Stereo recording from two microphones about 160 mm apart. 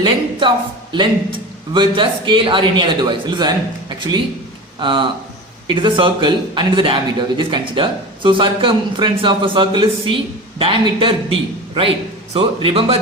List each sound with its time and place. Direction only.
0.0 s a man's voice: 30° right (ahead or behind)
1.7 s a man's voice: 30° right (ahead or behind)